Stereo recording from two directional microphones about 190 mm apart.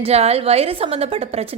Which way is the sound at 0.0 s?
30° right (ahead or behind).